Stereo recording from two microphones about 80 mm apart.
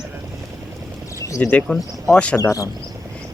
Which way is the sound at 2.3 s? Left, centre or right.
Left.